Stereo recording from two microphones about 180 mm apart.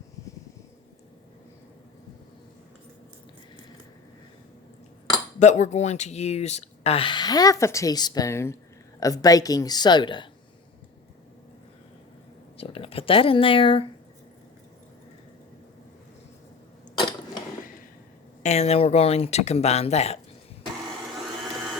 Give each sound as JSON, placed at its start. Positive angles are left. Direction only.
{"t": 5.4, "sound": "speech", "side_deg": 40}
{"t": 12.5, "sound": "speech", "side_deg": 30}
{"t": 16.9, "sound": "mechanisms", "side_deg": 25}
{"t": 18.4, "sound": "speech", "side_deg": 35}